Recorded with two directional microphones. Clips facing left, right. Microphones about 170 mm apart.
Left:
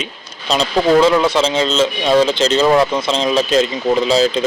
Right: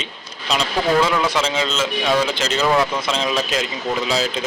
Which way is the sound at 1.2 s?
25° left (ahead or behind).